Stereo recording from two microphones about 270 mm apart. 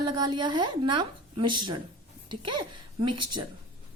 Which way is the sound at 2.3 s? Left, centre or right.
Right.